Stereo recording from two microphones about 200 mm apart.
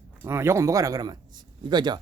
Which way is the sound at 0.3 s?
15° right (ahead or behind).